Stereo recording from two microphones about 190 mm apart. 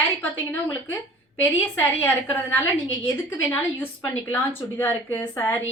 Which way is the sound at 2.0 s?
10° left (ahead or behind).